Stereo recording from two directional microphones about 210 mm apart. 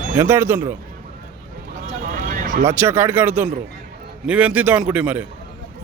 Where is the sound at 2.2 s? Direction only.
40° right (ahead or behind).